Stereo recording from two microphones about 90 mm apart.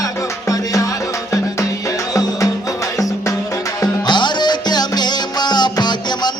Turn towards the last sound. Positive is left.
turn(degrees=55)  # may be behind; listen again after turning